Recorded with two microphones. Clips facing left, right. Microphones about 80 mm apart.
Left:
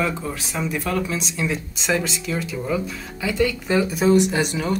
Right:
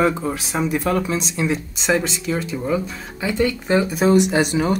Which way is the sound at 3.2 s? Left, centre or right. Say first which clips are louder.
Right 1 dB; right.